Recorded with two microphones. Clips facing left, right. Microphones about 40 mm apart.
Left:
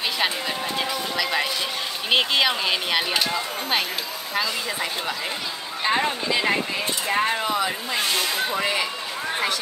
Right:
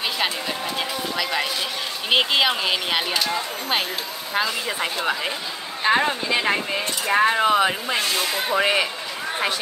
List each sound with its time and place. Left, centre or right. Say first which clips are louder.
0.7 s speech: left 1 dB; centre
5.9 s speech: right 3 dB; centre
7.3 s speech: right 6 dB; right